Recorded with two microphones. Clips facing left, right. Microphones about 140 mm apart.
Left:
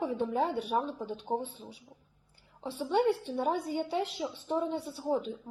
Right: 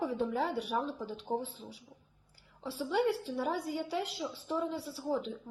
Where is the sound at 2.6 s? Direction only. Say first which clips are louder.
Left 3 dB; 25° left (ahead or behind).